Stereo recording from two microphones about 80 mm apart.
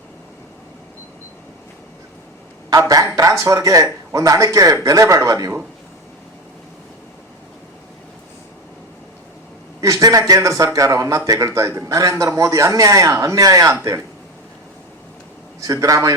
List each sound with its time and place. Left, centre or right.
2.6 s a man's voice: right
9.8 s a man's voice: right
15.6 s a man's voice: right